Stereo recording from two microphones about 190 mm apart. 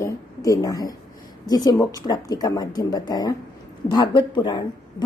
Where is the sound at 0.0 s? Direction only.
20° left (ahead or behind).